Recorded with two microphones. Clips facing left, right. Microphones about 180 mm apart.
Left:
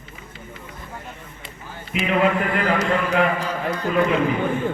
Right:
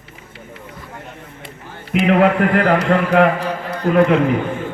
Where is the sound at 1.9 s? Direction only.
65° right (ahead or behind).